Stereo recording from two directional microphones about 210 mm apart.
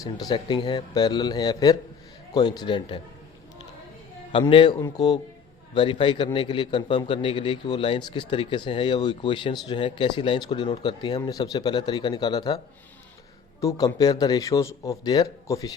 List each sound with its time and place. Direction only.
0.0 s a man's voice: 20° left (ahead or behind)
4.3 s a man's voice: 25° left (ahead or behind)
13.6 s speech: 15° left (ahead or behind)